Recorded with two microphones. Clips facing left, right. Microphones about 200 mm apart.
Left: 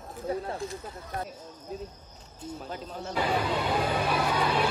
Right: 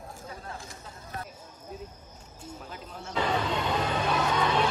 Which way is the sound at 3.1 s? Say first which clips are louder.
Left 1 dB; 10° left (ahead or behind).